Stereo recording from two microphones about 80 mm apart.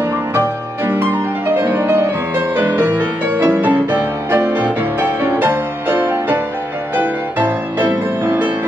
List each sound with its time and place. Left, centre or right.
0.3 s music: right